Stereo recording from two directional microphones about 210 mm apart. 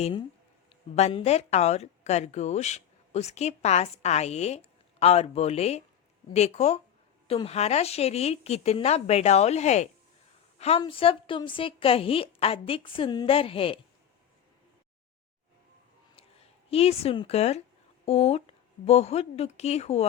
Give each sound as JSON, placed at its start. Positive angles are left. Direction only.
{"t": 0.0, "sound": "a woman's voice", "side_deg": 20}
{"t": 16.7, "sound": "a woman's voice", "side_deg": 30}